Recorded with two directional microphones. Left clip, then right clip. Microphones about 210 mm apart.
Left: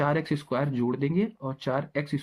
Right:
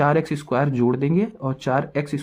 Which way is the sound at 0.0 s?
45° right (ahead or behind).